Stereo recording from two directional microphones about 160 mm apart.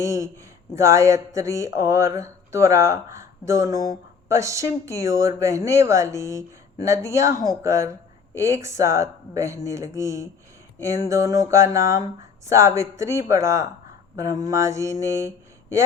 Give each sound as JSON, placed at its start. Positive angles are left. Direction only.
{"t": 0.0, "sound": "speech", "side_deg": -20}